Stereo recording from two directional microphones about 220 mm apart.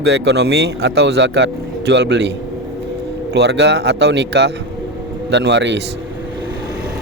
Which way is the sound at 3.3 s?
50° right (ahead or behind).